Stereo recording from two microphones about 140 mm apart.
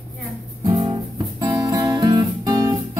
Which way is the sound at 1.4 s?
25° right (ahead or behind).